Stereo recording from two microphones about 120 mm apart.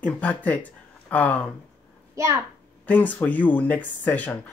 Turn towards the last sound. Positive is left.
turn(degrees=15)  # may be behind; listen again after turning